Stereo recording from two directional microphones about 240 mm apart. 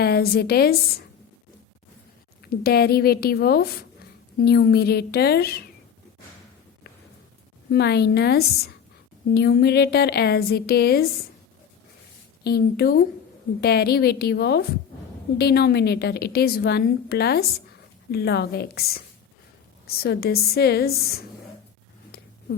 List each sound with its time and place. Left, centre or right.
0.0 s a woman's voice: left
2.4 s speech: left
7.7 s a woman's voice: left
12.4 s a woman's voice: left